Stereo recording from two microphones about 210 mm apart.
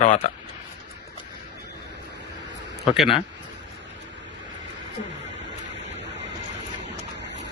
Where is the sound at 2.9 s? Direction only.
Centre (ahead or behind).